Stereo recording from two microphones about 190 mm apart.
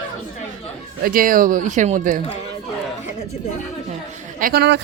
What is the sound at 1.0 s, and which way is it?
Speech, 50° right (ahead or behind).